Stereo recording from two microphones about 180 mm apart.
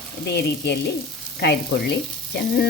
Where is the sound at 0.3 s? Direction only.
70° left (ahead or behind).